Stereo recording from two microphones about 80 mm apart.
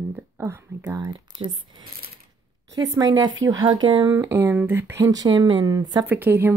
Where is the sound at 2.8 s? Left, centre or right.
Right.